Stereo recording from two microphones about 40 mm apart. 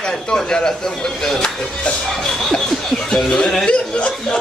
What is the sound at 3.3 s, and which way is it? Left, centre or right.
Speech, left.